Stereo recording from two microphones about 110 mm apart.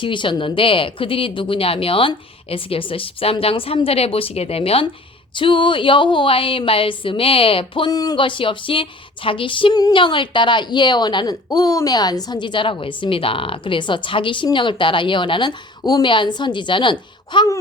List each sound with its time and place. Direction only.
0.0 s speech: 50° left (ahead or behind)
5.3 s speech: 50° left (ahead or behind)
7.9 s speech: 35° left (ahead or behind)